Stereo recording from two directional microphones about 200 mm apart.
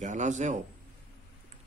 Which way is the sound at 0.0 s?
35° right (ahead or behind).